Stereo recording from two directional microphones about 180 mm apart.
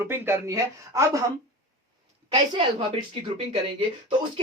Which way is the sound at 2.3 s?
30° right (ahead or behind).